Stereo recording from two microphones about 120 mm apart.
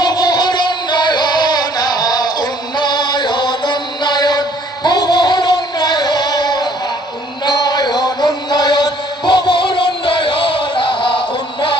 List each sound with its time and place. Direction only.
0.0 s music: 35° left (ahead or behind)
2.8 s chant: 40° left (ahead or behind)
4.8 s music: 35° left (ahead or behind)
7.4 s chant: 35° left (ahead or behind)